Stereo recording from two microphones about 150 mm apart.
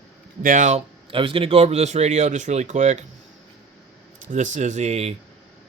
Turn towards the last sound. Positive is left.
turn(degrees=-45)  # may be behind; listen again after turning